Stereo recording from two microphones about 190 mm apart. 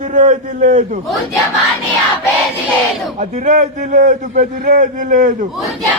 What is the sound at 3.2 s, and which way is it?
A man's voice, 40° right (ahead or behind).